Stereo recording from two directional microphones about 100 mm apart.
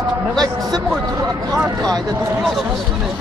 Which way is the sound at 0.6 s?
Centre (ahead or behind).